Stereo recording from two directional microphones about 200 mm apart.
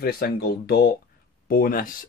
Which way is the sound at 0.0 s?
50° left (ahead or behind).